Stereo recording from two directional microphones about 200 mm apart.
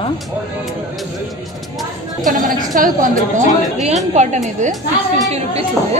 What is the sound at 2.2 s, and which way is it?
A woman's voice, 40° right (ahead or behind).